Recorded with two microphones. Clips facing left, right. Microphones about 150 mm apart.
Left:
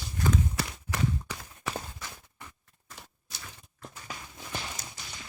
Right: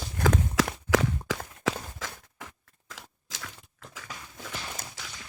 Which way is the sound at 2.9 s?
90° right.